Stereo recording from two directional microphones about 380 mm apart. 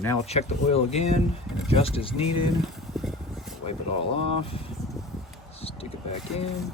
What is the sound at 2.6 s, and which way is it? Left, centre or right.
Vehicle, centre.